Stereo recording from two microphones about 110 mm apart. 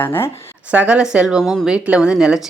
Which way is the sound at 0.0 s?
20° left (ahead or behind).